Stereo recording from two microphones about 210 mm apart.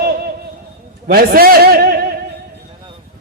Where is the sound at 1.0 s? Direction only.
45° right (ahead or behind).